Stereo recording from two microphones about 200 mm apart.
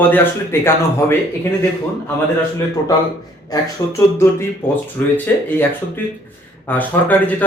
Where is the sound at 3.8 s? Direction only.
15° left (ahead or behind).